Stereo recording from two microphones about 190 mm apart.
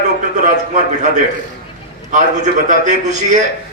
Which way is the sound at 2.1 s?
40° right (ahead or behind).